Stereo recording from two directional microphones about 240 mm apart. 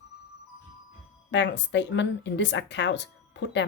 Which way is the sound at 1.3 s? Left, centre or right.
Left.